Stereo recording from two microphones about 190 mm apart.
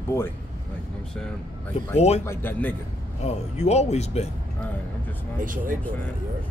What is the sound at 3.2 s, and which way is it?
Speech, 35° left (ahead or behind).